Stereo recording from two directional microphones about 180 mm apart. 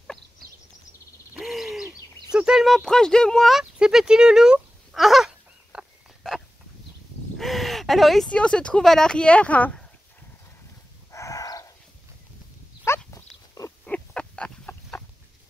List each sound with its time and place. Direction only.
0.4 s a sound: centre (ahead or behind)
7.3 s speech: centre (ahead or behind)
11.1 s dog: 15° left (ahead or behind)
12.8 s pig: 15° left (ahead or behind)